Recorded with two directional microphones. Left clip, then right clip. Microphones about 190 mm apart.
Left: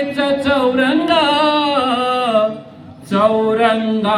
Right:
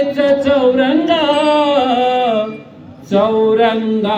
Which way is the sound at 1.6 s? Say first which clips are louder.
Right 3 dB; 25° left (ahead or behind).